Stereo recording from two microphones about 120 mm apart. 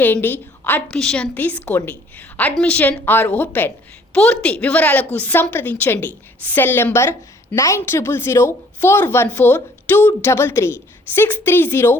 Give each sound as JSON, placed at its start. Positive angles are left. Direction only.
{"t": 0.0, "sound": "a woman's voice", "side_deg": 15}
{"t": 0.9, "sound": "a woman's voice", "side_deg": 5}